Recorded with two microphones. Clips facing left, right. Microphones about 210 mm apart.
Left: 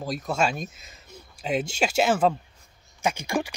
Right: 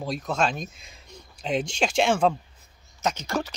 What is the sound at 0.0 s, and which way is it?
Speech, 5° left (ahead or behind).